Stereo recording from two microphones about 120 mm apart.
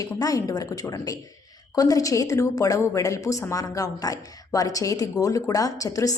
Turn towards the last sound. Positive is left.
turn(degrees=30)  # may be behind; listen again after turning